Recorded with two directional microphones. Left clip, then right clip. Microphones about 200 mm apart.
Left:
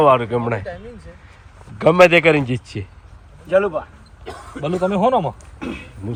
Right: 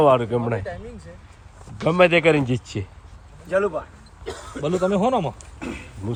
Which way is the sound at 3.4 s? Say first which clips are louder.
Left 5 dB; 40° left (ahead or behind).